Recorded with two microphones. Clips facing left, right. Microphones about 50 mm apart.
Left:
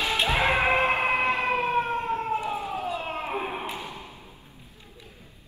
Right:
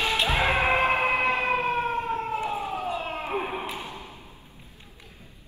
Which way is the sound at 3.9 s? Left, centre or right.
Right.